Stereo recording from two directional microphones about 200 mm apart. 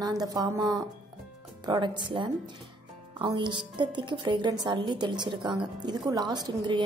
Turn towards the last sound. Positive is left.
turn(degrees=-20)  # may be behind; listen again after turning